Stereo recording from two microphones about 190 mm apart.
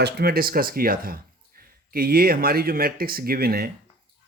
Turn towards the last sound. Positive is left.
turn(degrees=-55)  # may be behind; listen again after turning